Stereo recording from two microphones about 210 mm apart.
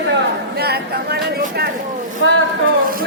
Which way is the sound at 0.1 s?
50° right (ahead or behind).